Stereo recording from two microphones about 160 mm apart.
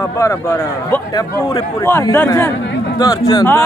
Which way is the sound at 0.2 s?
15° left (ahead or behind).